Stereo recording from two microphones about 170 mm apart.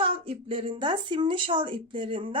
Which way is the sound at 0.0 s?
35° right (ahead or behind).